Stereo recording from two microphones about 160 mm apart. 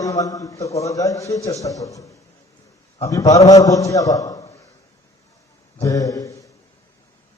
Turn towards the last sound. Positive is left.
turn(degrees=20)  # may be behind; listen again after turning